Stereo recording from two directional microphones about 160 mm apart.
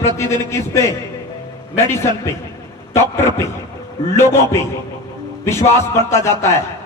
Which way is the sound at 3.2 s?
15° left (ahead or behind).